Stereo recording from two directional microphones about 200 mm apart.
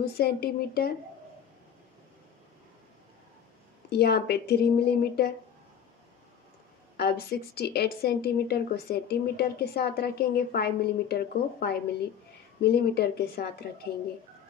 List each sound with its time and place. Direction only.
0.0 s speech: 50° left (ahead or behind)
3.9 s speech: 55° left (ahead or behind)
7.0 s speech: 50° left (ahead or behind)